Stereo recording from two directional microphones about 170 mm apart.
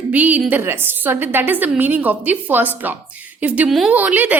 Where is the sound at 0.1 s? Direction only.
10° right (ahead or behind).